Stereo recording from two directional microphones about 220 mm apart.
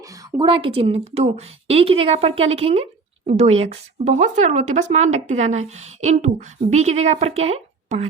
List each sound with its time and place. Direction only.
0.3 s a woman's voice: 20° right (ahead or behind)